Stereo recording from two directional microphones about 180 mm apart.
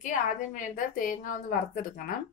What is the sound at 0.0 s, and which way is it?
A woman's voice, 45° left (ahead or behind).